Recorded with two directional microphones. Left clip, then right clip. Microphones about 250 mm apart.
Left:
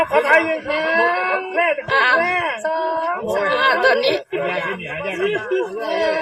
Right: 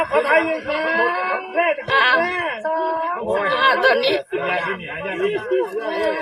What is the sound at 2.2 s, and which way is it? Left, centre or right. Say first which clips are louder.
Speech: left 3 dB; centre.